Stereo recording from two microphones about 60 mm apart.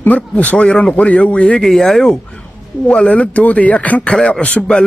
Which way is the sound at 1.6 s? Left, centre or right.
Centre.